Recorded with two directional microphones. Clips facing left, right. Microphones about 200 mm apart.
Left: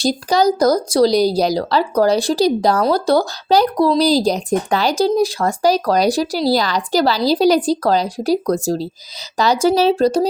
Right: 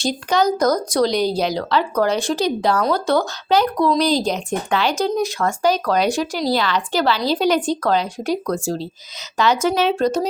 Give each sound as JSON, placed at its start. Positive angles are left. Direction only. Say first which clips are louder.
{"t": 0.0, "sound": "speech", "louder": "left 3 dB", "side_deg": 35}